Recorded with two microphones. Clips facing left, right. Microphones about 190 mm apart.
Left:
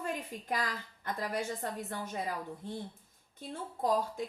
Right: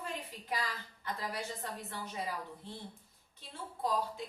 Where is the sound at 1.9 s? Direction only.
45° left (ahead or behind).